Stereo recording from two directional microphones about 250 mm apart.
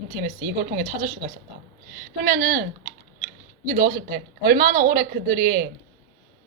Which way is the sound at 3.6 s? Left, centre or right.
Right.